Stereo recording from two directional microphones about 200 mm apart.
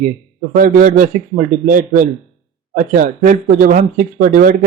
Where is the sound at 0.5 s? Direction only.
40° right (ahead or behind).